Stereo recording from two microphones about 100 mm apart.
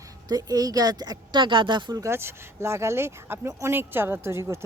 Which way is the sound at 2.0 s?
25° right (ahead or behind).